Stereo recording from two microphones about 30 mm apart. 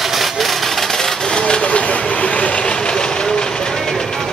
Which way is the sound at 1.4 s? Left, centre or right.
Left.